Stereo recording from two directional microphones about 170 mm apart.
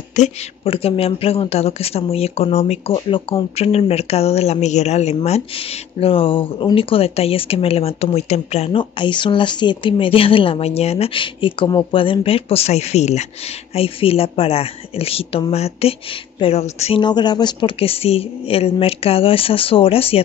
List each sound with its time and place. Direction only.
0.1 s speech: 40° left (ahead or behind)
17.0 s speech: 25° left (ahead or behind)